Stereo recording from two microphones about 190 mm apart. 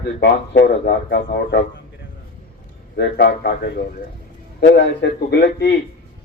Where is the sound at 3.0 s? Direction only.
60° left (ahead or behind).